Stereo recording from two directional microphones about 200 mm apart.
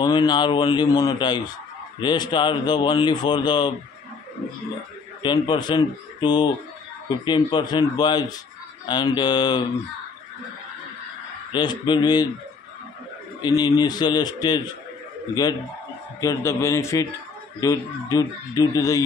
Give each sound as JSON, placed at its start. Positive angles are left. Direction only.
{"t": 0.0, "sound": "speech", "side_deg": 20}
{"t": 5.2, "sound": "speech", "side_deg": 20}
{"t": 11.5, "sound": "speech", "side_deg": 20}
{"t": 13.4, "sound": "speech", "side_deg": 20}
{"t": 16.2, "sound": "speech", "side_deg": 15}